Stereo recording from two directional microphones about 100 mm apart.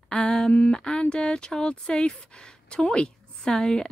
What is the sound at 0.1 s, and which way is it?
Speech, 5° left (ahead or behind).